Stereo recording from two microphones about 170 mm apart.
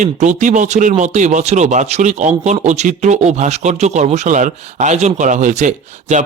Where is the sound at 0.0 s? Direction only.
45° right (ahead or behind).